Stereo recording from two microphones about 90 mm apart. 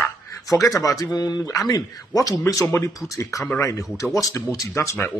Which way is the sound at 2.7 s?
30° left (ahead or behind).